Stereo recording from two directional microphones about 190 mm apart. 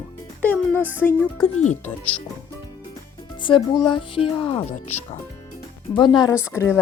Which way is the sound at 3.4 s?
25° left (ahead or behind).